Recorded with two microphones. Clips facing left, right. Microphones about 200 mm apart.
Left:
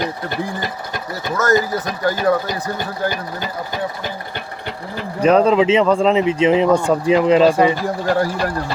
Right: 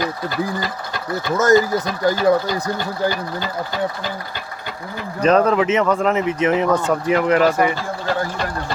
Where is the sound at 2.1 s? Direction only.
15° left (ahead or behind).